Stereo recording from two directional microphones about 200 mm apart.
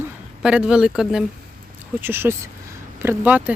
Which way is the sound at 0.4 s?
5° right (ahead or behind).